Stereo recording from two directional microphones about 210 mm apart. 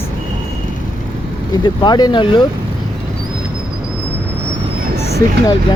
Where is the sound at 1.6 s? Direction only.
20° left (ahead or behind).